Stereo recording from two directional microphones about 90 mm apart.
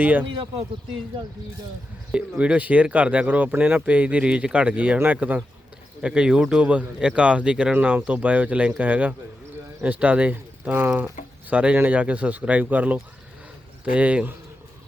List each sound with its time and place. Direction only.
0.0 s speech: 20° right (ahead or behind)
2.1 s speech: 10° right (ahead or behind)